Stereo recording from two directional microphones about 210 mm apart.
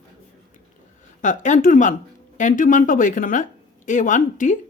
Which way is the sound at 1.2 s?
35° left (ahead or behind).